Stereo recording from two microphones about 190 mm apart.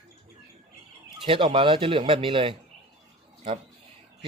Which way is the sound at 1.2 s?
30° right (ahead or behind).